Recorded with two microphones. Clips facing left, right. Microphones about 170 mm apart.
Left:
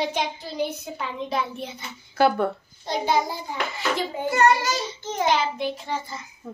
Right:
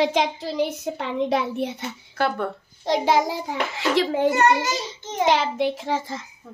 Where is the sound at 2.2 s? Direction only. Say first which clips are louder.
Left 4 dB; 5° left (ahead or behind).